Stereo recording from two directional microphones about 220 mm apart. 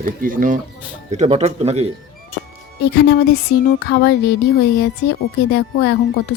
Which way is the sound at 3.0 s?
45° left (ahead or behind).